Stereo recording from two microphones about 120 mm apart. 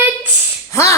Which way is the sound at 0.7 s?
25° left (ahead or behind).